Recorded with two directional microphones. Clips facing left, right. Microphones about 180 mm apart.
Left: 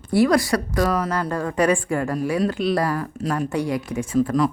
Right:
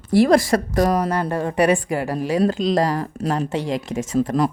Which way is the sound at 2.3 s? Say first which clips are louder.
Right 5 dB; 35° right (ahead or behind).